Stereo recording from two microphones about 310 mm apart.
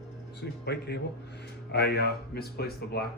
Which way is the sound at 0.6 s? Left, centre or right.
Left.